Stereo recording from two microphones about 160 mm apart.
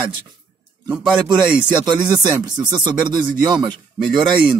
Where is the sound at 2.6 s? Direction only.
25° right (ahead or behind).